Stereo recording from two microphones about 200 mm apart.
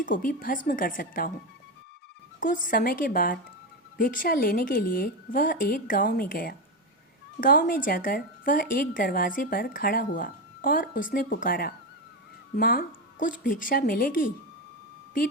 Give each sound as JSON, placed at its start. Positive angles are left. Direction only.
{"t": 0.0, "sound": "speech", "side_deg": 40}
{"t": 2.4, "sound": "speech", "side_deg": 40}